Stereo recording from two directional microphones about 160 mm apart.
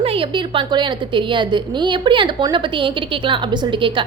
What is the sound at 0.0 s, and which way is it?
A woman's voice, 35° right (ahead or behind).